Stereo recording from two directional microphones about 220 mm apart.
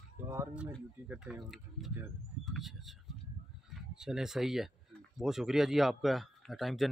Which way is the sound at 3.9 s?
Centre (ahead or behind).